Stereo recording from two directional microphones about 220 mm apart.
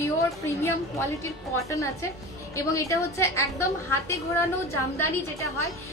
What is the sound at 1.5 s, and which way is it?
A woman's voice, 15° left (ahead or behind).